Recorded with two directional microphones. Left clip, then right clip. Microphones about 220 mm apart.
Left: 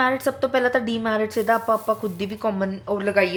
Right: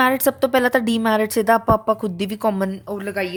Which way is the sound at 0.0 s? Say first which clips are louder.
Right 4 dB; 45° right (ahead or behind).